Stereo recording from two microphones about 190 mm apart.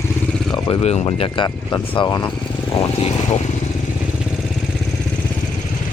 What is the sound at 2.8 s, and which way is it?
Speech, 35° left (ahead or behind).